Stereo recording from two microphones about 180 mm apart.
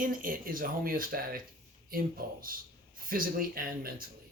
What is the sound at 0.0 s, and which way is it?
Speech, 50° right (ahead or behind).